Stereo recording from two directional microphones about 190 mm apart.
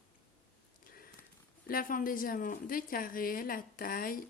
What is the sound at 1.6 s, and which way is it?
A woman's voice, 50° left (ahead or behind).